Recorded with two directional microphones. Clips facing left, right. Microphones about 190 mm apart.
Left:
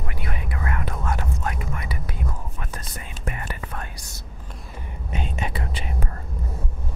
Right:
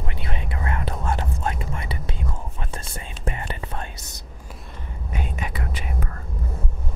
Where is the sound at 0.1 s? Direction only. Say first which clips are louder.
Even; 25° right (ahead or behind).